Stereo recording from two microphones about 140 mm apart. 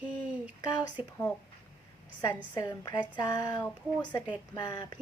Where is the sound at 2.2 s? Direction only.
25° left (ahead or behind).